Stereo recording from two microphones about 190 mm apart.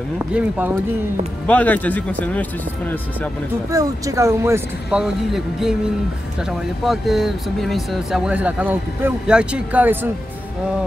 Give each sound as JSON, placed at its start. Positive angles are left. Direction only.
{"t": 0.3, "sound": "speech", "side_deg": -10}
{"t": 1.5, "sound": "speech", "side_deg": 10}
{"t": 3.7, "sound": "speech", "side_deg": -15}
{"t": 5.0, "sound": "speech", "side_deg": 0}
{"t": 6.8, "sound": "speech", "side_deg": 0}